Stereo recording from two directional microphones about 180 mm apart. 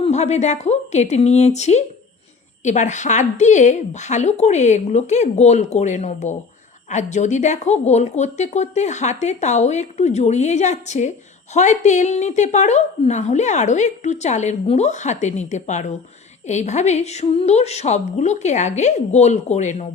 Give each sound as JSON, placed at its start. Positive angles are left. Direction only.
{"t": 0.0, "sound": "a woman's voice", "side_deg": 40}